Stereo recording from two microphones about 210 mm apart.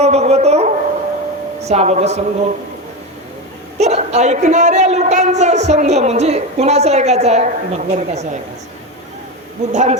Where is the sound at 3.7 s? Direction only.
30° right (ahead or behind).